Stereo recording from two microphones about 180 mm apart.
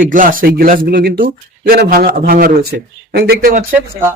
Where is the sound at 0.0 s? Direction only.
50° right (ahead or behind).